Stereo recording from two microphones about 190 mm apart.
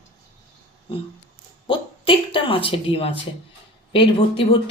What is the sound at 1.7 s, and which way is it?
A woman's voice, 25° left (ahead or behind).